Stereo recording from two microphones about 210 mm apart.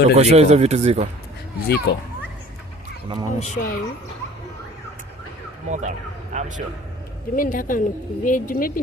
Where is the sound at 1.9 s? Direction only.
55° left (ahead or behind).